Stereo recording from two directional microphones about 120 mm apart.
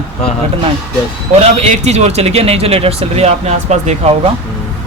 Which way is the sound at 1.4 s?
65° right (ahead or behind).